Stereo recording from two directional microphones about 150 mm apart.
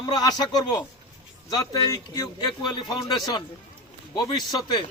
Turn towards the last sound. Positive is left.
turn(degrees=30)  # may be behind; listen again after turning